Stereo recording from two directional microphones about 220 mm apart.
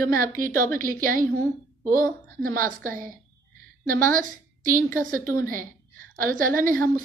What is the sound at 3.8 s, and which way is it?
A woman's voice, 40° right (ahead or behind).